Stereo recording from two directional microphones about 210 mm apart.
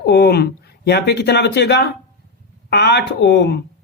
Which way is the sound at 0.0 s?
50° left (ahead or behind).